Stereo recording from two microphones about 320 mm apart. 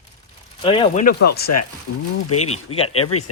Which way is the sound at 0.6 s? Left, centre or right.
Centre.